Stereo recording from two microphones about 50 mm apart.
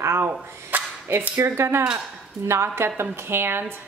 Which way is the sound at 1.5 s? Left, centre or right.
Right.